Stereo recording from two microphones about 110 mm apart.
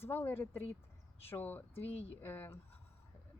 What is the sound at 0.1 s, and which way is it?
Speech, 20° left (ahead or behind).